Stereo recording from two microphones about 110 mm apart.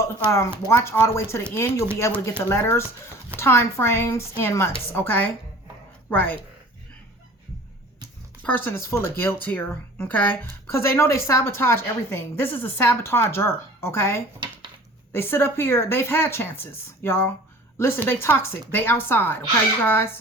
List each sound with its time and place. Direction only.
0.3 s speech: 25° left (ahead or behind)
8.4 s speech: 15° left (ahead or behind)
14.3 s a sound: 45° right (ahead or behind)
15.1 s speech: 20° left (ahead or behind)